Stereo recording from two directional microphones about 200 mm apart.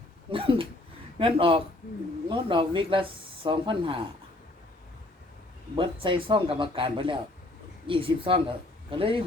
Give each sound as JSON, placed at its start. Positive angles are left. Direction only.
{"t": 0.3, "sound": "speech", "side_deg": -25}
{"t": 5.7, "sound": "speech", "side_deg": -25}